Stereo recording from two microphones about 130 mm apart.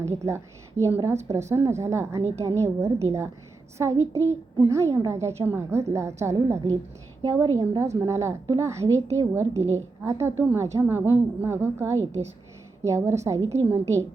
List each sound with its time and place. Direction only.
0.0 s a woman's voice: 20° right (ahead or behind)
7.6 s a woman's voice: 30° right (ahead or behind)